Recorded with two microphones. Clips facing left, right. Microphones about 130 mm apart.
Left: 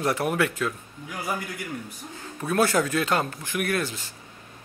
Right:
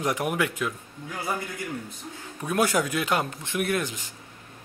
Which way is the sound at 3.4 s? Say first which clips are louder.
Even; 25° right (ahead or behind).